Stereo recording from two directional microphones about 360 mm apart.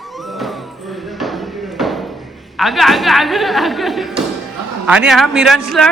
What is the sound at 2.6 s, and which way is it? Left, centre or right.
Speech, centre.